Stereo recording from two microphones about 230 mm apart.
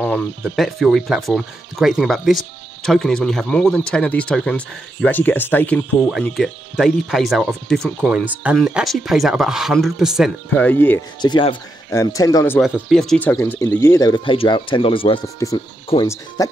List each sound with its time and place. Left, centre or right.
0.0 s speech: centre
11.1 s speech: centre
12.5 s speech: centre